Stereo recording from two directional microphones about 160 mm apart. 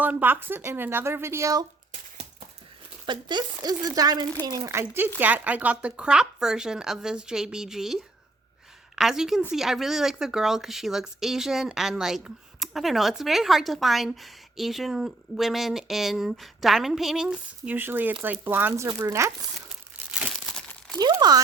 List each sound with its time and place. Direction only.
0.0 s a woman's voice: 10° right (ahead or behind)
3.1 s a woman's voice: 30° right (ahead or behind); by 7.9 s 5° right (ahead or behind)
9.0 s a woman's voice: 5° right (ahead or behind); by 19.3 s 20° right (ahead or behind)
20.1 s crumpling: 5° right (ahead or behind)
21.0 s speech: 25° right (ahead or behind)